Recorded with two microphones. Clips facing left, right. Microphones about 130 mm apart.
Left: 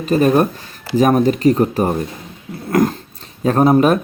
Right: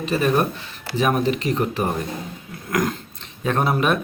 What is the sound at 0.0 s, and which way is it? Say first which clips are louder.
Speech: left 6 dB; 40° left (ahead or behind).